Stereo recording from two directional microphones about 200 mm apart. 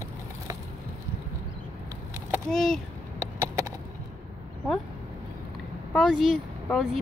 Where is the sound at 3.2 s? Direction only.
15° right (ahead or behind).